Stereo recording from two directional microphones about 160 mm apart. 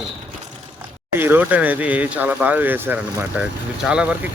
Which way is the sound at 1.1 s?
15° right (ahead or behind).